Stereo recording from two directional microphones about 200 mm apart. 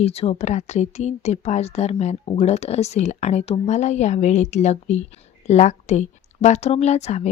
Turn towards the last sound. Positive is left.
turn(degrees=35)  # may be behind; listen again after turning